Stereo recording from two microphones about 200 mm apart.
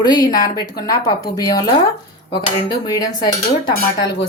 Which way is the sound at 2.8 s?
20° left (ahead or behind).